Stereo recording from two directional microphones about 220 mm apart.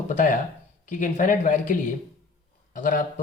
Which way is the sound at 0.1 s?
35° left (ahead or behind).